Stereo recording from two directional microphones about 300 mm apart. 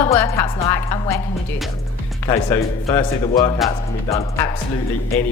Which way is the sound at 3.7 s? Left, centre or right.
Centre.